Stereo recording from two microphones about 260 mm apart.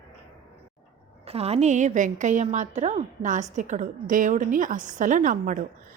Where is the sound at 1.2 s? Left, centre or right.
Right.